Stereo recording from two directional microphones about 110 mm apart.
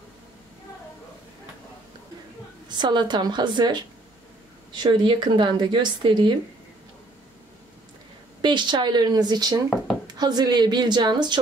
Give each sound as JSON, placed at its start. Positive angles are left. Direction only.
{"t": 2.7, "sound": "a woman's voice", "side_deg": -45}
{"t": 4.8, "sound": "speech", "side_deg": -50}
{"t": 8.4, "sound": "a woman's voice", "side_deg": -45}